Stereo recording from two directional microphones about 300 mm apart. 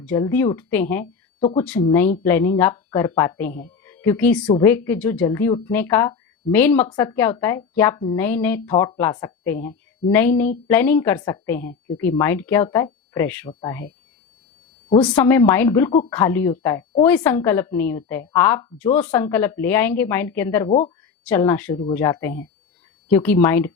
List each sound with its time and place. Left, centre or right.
0.0 s a woman's voice: centre
14.8 s a woman's voice: centre
20.7 s speech: left
21.2 s a woman's voice: centre